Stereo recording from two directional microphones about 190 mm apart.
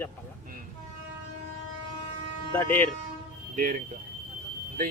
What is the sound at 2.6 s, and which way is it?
Speech, 10° left (ahead or behind).